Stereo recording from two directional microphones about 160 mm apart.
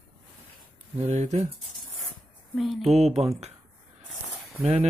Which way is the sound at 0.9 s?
45° right (ahead or behind).